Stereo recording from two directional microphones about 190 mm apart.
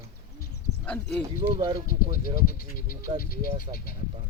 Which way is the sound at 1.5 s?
25° right (ahead or behind).